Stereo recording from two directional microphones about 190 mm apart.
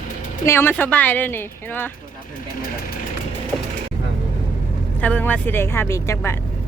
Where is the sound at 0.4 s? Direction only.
15° left (ahead or behind).